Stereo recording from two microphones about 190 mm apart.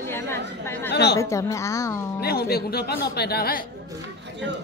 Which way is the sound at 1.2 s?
15° left (ahead or behind).